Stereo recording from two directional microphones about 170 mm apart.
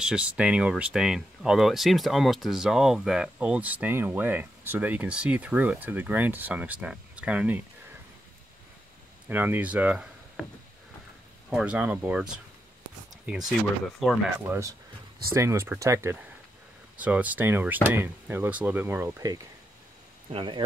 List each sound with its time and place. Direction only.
0.0 s speech: 5° right (ahead or behind)
9.3 s speech: 10° right (ahead or behind)
11.5 s speech: 5° right (ahead or behind)
14.5 s speech: 20° right (ahead or behind)
20.2 s speech: 30° right (ahead or behind)